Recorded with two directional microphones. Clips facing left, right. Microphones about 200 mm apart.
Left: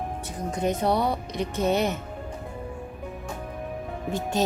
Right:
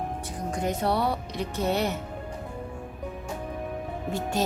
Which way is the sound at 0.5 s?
20° left (ahead or behind).